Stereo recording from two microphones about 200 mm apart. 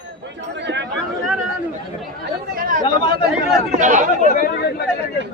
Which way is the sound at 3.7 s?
40° right (ahead or behind).